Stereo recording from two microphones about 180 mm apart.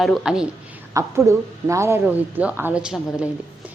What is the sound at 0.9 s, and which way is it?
A woman's voice, 15° right (ahead or behind).